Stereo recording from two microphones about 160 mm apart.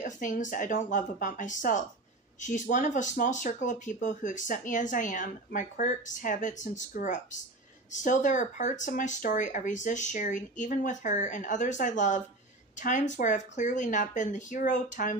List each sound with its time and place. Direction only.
0.0 s speech: 55° left (ahead or behind)